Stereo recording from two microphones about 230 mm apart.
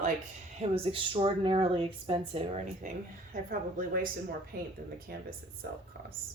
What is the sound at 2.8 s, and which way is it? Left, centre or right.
Speech, right.